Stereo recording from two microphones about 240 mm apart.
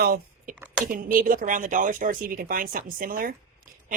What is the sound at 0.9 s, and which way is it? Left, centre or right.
Speech, right.